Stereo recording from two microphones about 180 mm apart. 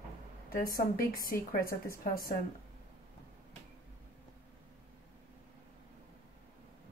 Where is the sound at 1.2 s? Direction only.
55° left (ahead or behind).